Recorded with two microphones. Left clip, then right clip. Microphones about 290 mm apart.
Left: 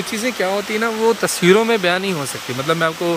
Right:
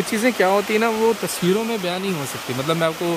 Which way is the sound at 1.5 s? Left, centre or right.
Centre.